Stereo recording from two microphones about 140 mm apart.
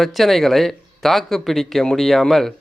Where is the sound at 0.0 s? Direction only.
Centre (ahead or behind).